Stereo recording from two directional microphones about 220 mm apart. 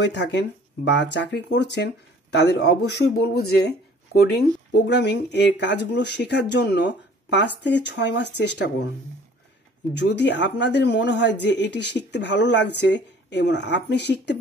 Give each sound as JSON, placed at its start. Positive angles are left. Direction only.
{"t": 0.0, "sound": "speech", "side_deg": 50}
{"t": 4.1, "sound": "speech", "side_deg": 45}
{"t": 9.9, "sound": "speech", "side_deg": 50}